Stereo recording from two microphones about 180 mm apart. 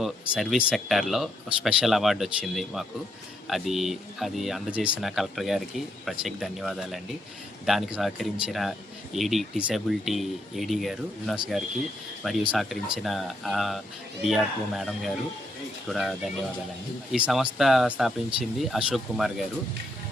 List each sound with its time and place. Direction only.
0.0 s speech: centre (ahead or behind)
12.5 s speech: centre (ahead or behind)